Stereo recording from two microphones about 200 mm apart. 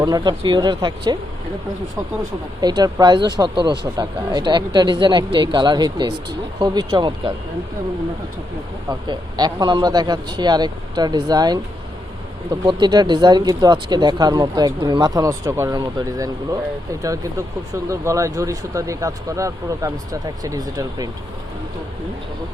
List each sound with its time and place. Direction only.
0.0 s speech: 20° right (ahead or behind)
2.6 s speech: 20° right (ahead or behind)
8.9 s speech: 20° right (ahead or behind)
12.6 s speech: 20° right (ahead or behind)